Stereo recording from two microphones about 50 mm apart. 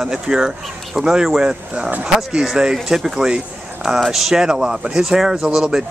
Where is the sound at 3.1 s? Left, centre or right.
Right.